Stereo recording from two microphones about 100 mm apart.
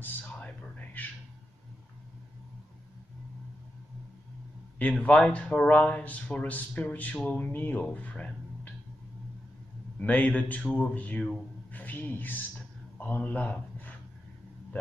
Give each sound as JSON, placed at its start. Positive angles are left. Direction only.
{"t": 0.0, "sound": "a sound", "side_deg": 15}
{"t": 4.9, "sound": "speech", "side_deg": 10}
{"t": 9.9, "sound": "a man's voice", "side_deg": 15}